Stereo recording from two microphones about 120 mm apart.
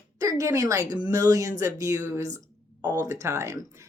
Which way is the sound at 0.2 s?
25° right (ahead or behind).